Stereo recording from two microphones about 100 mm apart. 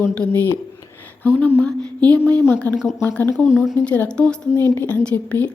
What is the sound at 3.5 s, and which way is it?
Speech, 5° right (ahead or behind).